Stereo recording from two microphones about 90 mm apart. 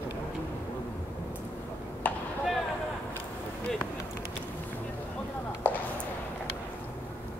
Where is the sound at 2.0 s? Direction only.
15° left (ahead or behind).